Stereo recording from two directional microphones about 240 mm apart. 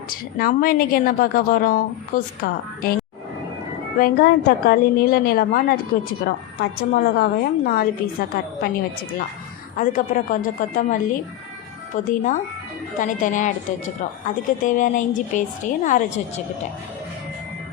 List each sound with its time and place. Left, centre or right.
0.3 s a woman's voice: left
3.9 s a woman's voice: left